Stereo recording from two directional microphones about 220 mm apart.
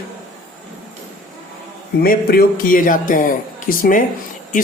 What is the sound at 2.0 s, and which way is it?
Speech, 40° left (ahead or behind).